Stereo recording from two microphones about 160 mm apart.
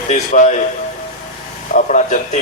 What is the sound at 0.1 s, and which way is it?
Speech, 45° left (ahead or behind).